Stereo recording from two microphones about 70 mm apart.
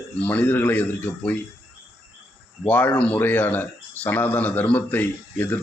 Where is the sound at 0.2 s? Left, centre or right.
Centre.